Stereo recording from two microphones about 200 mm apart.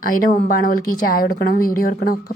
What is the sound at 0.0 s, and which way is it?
Speech, 45° left (ahead or behind).